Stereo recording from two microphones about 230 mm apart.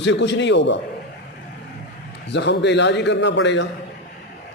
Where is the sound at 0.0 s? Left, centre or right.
Left.